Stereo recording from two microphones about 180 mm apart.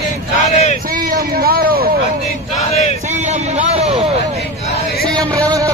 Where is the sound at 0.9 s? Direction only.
55° right (ahead or behind).